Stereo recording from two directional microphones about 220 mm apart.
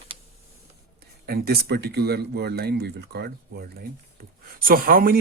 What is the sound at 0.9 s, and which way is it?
Speech, 45° right (ahead or behind).